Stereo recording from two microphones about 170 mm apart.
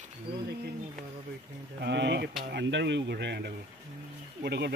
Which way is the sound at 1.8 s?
85° right.